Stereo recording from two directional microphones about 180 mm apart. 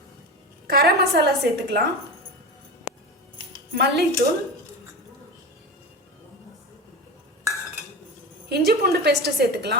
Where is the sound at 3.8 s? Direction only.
65° right (ahead or behind).